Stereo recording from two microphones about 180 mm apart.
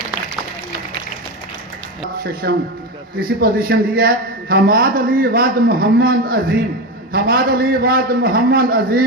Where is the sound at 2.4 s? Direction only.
65° right (ahead or behind).